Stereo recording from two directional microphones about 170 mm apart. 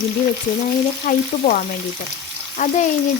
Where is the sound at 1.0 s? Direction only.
55° left (ahead or behind).